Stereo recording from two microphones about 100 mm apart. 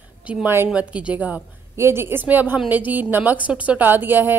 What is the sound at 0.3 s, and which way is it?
A woman's voice, 20° right (ahead or behind).